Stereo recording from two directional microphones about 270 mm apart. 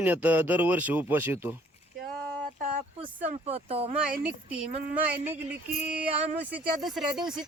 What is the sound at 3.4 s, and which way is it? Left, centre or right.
Speech, right.